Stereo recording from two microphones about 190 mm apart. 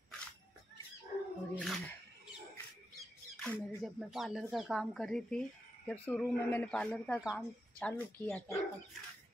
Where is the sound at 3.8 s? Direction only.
Centre (ahead or behind).